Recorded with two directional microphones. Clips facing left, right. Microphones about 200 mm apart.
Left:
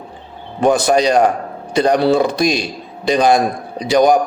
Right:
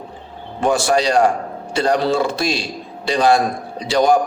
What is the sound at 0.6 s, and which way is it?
A man's voice, 20° left (ahead or behind).